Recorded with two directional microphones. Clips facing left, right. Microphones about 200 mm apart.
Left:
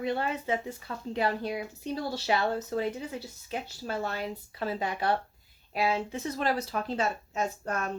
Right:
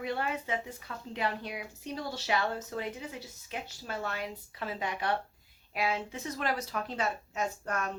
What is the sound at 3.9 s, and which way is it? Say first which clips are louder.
Speech: left 4 dB; 35° left (ahead or behind).